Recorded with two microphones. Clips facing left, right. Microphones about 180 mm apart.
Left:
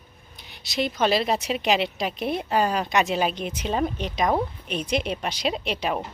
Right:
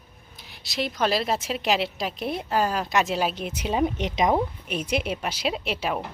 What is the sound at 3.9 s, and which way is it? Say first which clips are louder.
Speech: right 1 dB; 20° right (ahead or behind).